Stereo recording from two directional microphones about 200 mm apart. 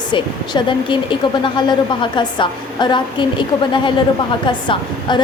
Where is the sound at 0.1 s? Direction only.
25° left (ahead or behind).